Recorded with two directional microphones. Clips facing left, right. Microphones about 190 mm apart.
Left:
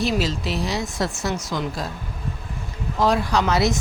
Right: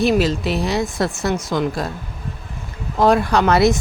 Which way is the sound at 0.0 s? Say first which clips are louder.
Right 6 dB; 55° right (ahead or behind).